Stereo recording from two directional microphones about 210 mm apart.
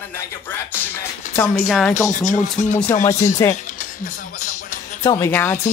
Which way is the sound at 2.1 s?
35° left (ahead or behind).